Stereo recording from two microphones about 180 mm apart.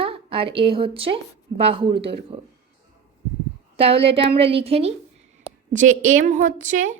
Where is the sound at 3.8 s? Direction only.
30° right (ahead or behind).